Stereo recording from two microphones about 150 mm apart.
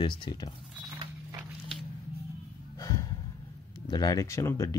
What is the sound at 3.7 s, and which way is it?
Speech, 25° left (ahead or behind).